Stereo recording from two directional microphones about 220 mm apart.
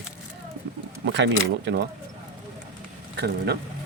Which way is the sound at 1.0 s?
55° right (ahead or behind).